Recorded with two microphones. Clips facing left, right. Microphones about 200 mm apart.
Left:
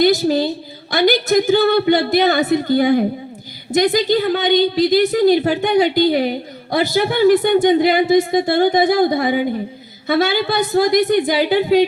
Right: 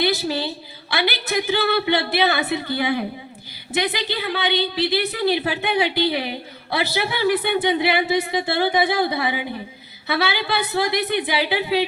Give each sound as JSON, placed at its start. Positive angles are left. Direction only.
{"t": 0.0, "sound": "a woman's voice", "side_deg": 45}